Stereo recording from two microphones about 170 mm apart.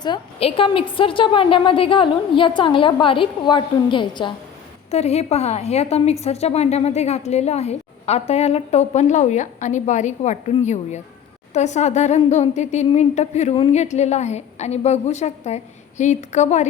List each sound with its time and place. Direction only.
0.0 s a woman's voice: 30° left (ahead or behind)
4.9 s a woman's voice: 40° left (ahead or behind)